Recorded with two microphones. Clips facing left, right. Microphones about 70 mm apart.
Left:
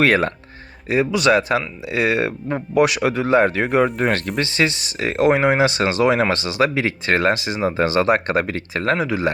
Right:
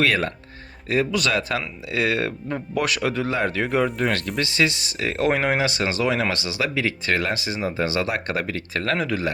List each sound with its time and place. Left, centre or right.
0.0 s speech: left
0.9 s speech: centre; by 3.8 s left
3.8 s speech: left
4.4 s speech: left
9.0 s speech: centre